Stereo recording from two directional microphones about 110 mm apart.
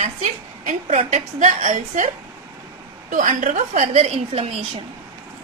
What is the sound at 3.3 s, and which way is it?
A woman's voice, 90° right.